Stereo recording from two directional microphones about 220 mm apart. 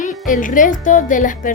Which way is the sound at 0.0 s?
35° left (ahead or behind).